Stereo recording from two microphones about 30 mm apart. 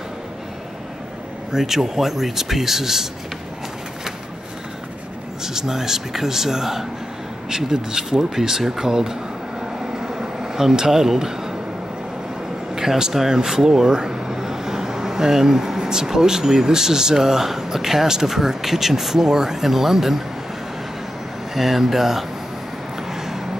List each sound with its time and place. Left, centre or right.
1.5 s speech: centre
5.4 s speech: centre
9.8 s vehicle: centre
10.9 s speech: centre
12.7 s speech: centre
21.5 s speech: centre
23.1 s a sound: centre